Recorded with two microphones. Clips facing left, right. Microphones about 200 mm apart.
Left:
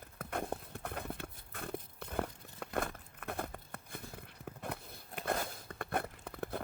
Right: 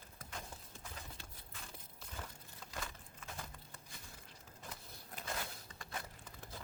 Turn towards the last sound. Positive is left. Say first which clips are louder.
# left 12 dB
turn(degrees=60)  # may be behind; listen again after turning